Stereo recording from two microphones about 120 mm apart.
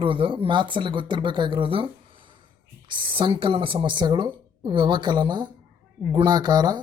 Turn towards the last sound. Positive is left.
turn(degrees=-35)  # may be behind; listen again after turning